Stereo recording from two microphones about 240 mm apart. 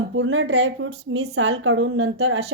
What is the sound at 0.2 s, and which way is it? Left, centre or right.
A woman's voice, right.